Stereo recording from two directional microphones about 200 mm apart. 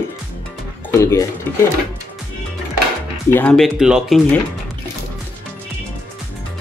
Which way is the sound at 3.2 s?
10° left (ahead or behind).